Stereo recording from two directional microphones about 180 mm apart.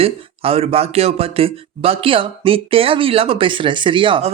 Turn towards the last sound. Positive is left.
turn(degrees=-30)  # may be behind; listen again after turning